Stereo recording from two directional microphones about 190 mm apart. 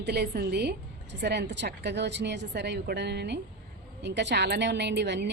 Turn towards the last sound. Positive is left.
turn(degrees=-65)  # may be behind; listen again after turning